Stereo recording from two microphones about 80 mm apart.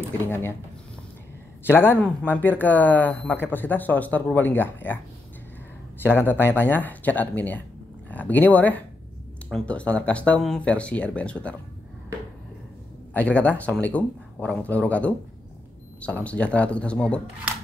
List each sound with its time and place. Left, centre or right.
0.3 s speech: left
1.7 s speech: left
6.0 s speech: left
13.1 s speech: centre